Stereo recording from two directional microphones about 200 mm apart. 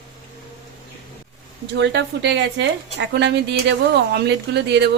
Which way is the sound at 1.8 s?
60° right (ahead or behind).